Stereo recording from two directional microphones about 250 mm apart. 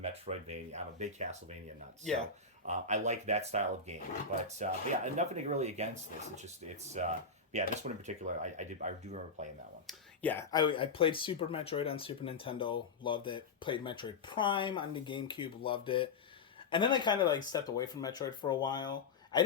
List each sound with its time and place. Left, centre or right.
0.0 s speech: right
2.6 s speech: right
9.8 s speech: centre